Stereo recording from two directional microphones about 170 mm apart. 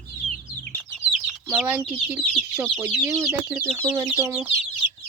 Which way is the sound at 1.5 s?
10° right (ahead or behind).